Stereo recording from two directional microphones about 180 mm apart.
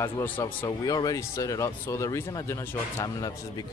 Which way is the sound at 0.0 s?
15° left (ahead or behind).